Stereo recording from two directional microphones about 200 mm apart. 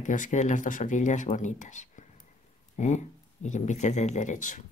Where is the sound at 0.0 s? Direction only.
40° left (ahead or behind).